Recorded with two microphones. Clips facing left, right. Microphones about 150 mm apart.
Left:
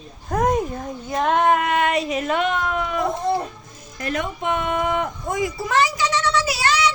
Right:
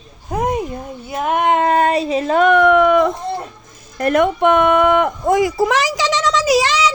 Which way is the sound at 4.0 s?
60° right (ahead or behind).